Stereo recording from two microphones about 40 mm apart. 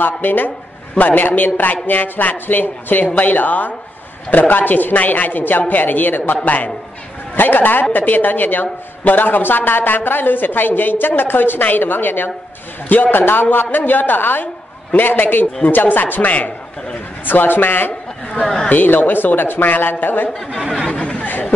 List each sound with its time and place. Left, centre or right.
0.0 s a man's voice: left
17.2 s a man's voice: left
20.9 s chatter: left
21.3 s chatter: left